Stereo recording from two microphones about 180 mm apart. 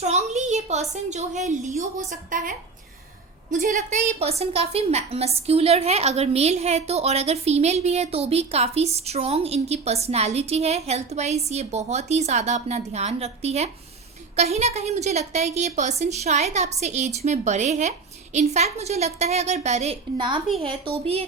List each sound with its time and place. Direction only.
0.0 s a woman's voice: 40° right (ahead or behind)
20.1 s a woman's voice: 25° right (ahead or behind)